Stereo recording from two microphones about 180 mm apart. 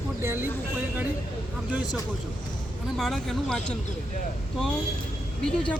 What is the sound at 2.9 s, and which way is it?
Speech, centre (ahead or behind).